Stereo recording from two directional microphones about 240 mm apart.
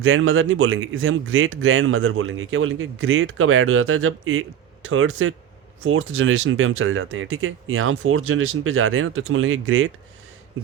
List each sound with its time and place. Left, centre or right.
0.0 s speech: right